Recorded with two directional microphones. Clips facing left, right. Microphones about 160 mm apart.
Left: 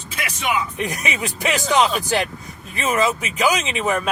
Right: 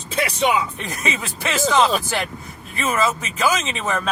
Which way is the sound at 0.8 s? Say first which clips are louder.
Left 2 dB; 15° left (ahead or behind).